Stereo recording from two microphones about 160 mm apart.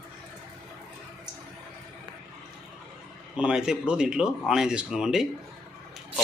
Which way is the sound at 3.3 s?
5° right (ahead or behind).